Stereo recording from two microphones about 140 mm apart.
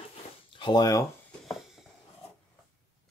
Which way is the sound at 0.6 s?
30° left (ahead or behind).